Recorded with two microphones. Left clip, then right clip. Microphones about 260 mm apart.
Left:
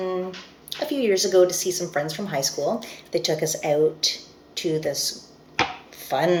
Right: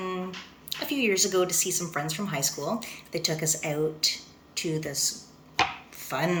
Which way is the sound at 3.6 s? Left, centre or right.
Centre.